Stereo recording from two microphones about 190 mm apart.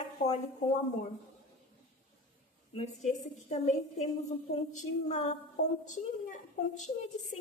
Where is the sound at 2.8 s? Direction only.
35° left (ahead or behind).